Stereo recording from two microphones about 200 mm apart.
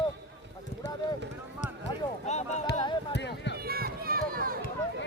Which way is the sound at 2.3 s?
35° left (ahead or behind).